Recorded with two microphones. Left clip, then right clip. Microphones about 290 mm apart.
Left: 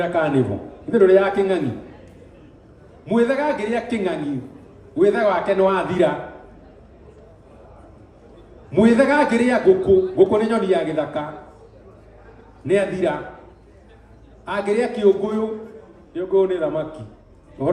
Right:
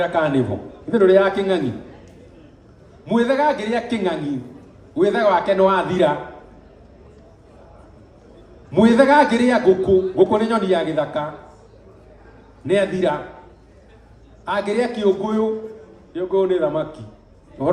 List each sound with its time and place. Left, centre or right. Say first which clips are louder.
0.0 s a man's voice: right 1 dB; right
3.1 s a man's voice: right 1 dB; right
8.7 s a man's voice: right 3 dB; right
12.6 s a man's voice: right 1 dB; right
14.4 s a man's voice: even; right